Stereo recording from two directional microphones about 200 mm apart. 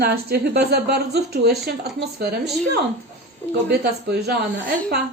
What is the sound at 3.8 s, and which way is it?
A woman's voice, 55° right (ahead or behind).